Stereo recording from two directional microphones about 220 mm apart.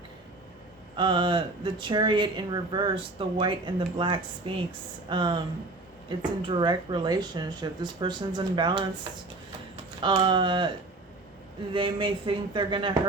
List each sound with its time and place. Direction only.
0.9 s speech: 20° right (ahead or behind)
10.0 s speech: 20° right (ahead or behind)
11.7 s speech: 25° right (ahead or behind)